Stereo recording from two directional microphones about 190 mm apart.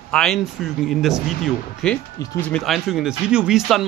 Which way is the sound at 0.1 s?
5° left (ahead or behind).